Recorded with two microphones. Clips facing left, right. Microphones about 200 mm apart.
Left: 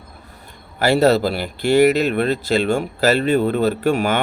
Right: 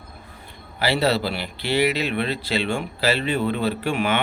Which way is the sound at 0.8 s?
45° left (ahead or behind).